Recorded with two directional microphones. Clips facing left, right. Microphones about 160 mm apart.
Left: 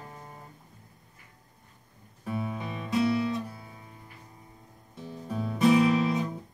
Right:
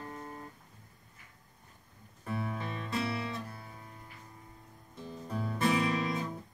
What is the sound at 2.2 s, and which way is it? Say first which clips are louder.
Guitar: left 3 dB; 15° left (ahead or behind).